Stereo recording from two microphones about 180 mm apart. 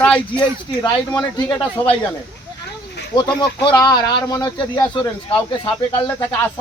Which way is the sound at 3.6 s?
25° left (ahead or behind).